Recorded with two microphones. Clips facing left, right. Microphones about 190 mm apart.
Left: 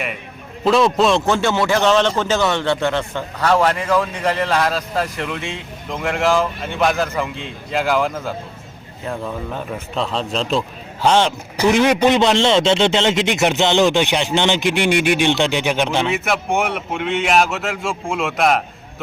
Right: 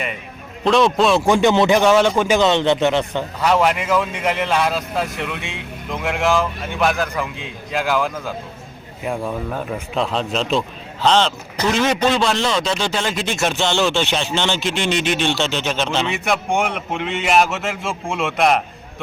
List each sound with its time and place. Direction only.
0.6 s speech: centre (ahead or behind)
1.2 s a man's voice: 15° right (ahead or behind); by 8.1 s centre (ahead or behind)
9.0 s speech: 10° right (ahead or behind)
11.0 s a man's voice: 15° left (ahead or behind)
16.0 s speech: centre (ahead or behind)